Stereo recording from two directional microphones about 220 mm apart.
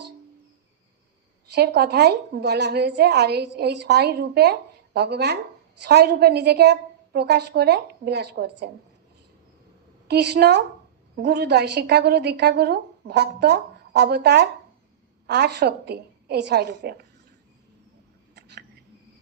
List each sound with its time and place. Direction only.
1.5 s a woman's voice: 50° right (ahead or behind)
10.1 s a woman's voice: 50° right (ahead or behind)
18.3 s a sound: 50° right (ahead or behind)